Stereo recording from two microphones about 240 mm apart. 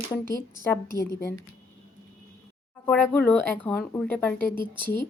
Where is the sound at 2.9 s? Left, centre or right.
Centre.